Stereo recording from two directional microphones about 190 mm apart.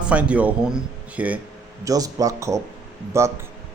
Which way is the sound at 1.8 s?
20° right (ahead or behind).